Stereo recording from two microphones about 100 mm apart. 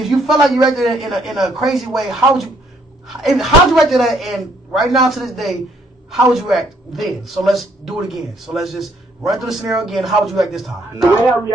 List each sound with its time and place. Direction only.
0.0 s a man's voice: centre (ahead or behind)